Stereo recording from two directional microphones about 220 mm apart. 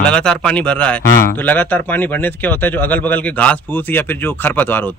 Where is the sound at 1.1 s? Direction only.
40° left (ahead or behind).